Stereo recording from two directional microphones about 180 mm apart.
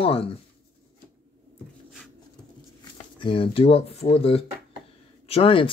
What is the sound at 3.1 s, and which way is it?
Speech, 30° left (ahead or behind).